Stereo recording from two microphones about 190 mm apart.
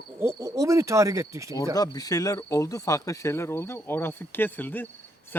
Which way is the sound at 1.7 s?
20° left (ahead or behind).